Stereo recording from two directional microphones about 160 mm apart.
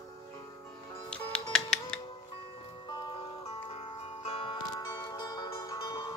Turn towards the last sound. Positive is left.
turn(degrees=25)  # may be behind; listen again after turning